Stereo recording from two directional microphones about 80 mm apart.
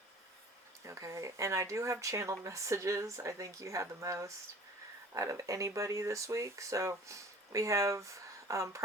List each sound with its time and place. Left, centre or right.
0.9 s speech: right